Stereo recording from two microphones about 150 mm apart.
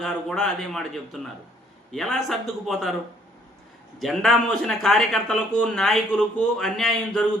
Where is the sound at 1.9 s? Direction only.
Centre (ahead or behind).